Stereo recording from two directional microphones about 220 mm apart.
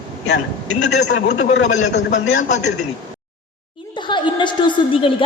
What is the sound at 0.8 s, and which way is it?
Speech, 50° left (ahead or behind).